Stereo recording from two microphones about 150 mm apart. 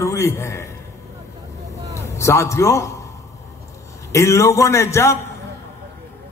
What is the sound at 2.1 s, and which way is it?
Speech, 20° left (ahead or behind).